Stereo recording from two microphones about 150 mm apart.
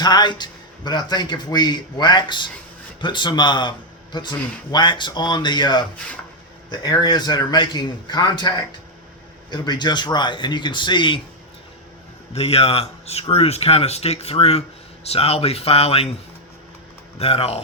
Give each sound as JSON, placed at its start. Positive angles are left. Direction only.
{"t": 0.0, "sound": "a man's voice", "side_deg": 30}
{"t": 12.3, "sound": "a man's voice", "side_deg": 40}
{"t": 17.2, "sound": "a man's voice", "side_deg": 40}